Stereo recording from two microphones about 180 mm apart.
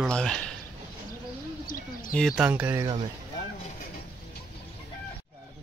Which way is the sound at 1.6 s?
50° left (ahead or behind).